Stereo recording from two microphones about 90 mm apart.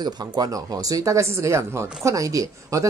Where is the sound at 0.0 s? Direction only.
45° right (ahead or behind).